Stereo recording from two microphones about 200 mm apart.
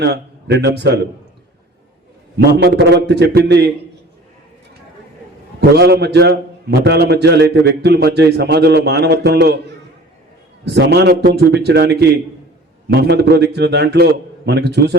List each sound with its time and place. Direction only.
0.0 s a man's voice: 55° right (ahead or behind)
2.4 s a man's voice: 55° right (ahead or behind)
5.5 s a man's voice: 55° right (ahead or behind)
10.8 s a man's voice: 55° right (ahead or behind)